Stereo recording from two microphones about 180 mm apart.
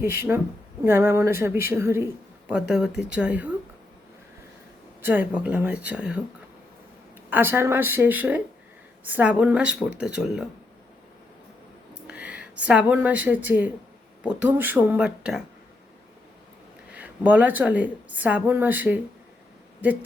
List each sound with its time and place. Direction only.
0.0 s a woman's voice: 15° right (ahead or behind)
5.0 s a woman's voice: 10° right (ahead or behind)
7.3 s a woman's voice: 10° right (ahead or behind)
12.0 s speech: 5° right (ahead or behind)
16.9 s a woman's voice: 10° right (ahead or behind)